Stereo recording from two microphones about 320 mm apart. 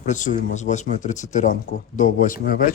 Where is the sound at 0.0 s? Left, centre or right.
Left.